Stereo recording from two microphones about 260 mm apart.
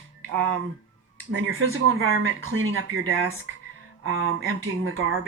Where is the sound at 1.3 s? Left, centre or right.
Right.